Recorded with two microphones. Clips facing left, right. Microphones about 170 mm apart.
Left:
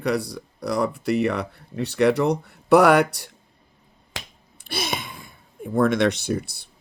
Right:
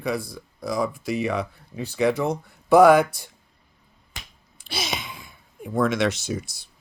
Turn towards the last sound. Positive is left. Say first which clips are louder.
# left 4 dB
turn(degrees=60)  # may be behind; listen again after turning